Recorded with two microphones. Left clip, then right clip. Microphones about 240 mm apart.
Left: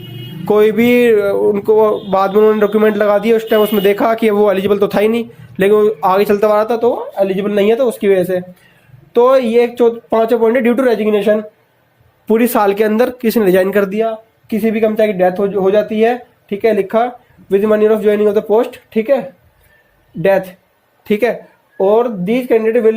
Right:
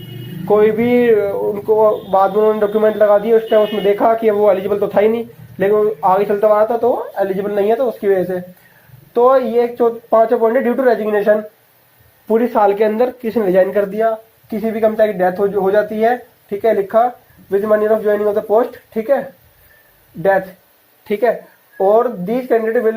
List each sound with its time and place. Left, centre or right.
0.4 s speech: left
7.5 s speech: left
9.2 s speech: left
12.3 s speech: left
14.6 s speech: left
15.0 s speech: left
18.2 s speech: left
21.0 s speech: left